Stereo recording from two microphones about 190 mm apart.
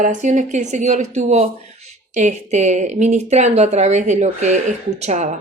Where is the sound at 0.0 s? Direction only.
40° right (ahead or behind).